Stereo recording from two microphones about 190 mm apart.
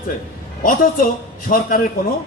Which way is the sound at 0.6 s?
50° left (ahead or behind).